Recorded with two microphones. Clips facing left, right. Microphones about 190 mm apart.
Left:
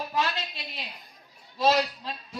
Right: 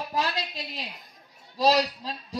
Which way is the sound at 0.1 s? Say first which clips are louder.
Right 2 dB; 35° right (ahead or behind).